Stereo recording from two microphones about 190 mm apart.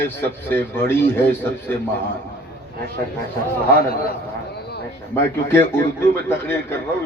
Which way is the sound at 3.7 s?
55° left (ahead or behind).